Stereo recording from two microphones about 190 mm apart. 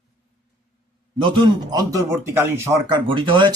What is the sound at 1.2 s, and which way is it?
Speech, 20° right (ahead or behind).